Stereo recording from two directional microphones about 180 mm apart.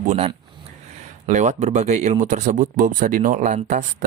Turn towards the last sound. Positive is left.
turn(degrees=-45)  # may be behind; listen again after turning